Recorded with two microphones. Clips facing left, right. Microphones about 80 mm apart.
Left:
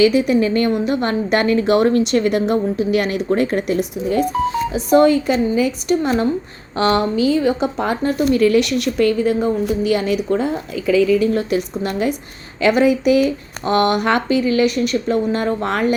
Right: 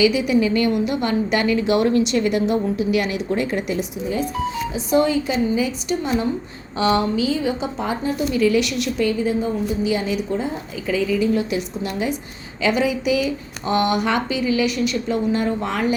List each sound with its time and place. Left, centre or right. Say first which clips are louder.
0.0 s a woman's voice: left 3 dB; left